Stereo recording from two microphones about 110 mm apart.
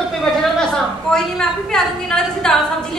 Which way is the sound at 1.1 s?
5° left (ahead or behind).